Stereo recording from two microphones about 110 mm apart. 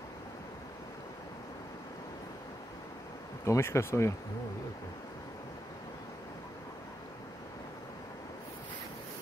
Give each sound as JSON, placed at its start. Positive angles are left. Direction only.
{"t": 3.4, "sound": "speech", "side_deg": 25}